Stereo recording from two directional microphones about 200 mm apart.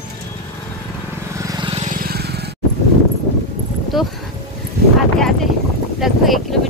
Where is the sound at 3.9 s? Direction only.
Centre (ahead or behind).